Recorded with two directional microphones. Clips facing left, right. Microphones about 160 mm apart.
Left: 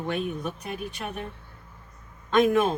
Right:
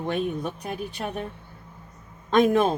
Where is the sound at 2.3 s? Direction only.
35° right (ahead or behind).